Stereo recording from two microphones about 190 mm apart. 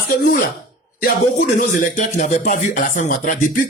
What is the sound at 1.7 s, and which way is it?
A man's voice, 45° left (ahead or behind).